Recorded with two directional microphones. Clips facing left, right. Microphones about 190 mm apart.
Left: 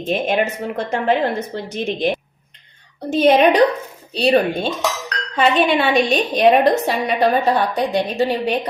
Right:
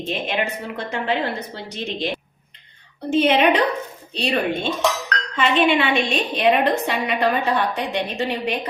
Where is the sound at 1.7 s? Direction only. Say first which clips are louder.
Left 6 dB; 50° left (ahead or behind).